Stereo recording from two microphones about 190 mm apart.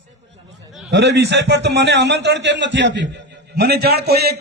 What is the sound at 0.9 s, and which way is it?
A man's voice, 60° right (ahead or behind).